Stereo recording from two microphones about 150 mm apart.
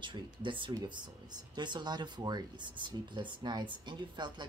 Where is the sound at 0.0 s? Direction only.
30° right (ahead or behind).